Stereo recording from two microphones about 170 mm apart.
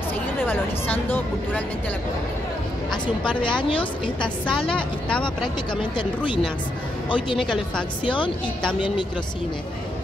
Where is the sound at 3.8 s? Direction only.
5° left (ahead or behind).